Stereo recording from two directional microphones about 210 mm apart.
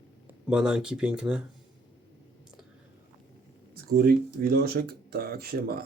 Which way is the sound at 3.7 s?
45° right (ahead or behind).